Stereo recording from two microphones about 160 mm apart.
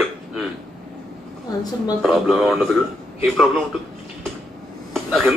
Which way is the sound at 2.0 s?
Centre (ahead or behind).